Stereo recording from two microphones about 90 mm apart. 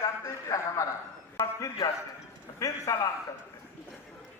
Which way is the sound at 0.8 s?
35° left (ahead or behind).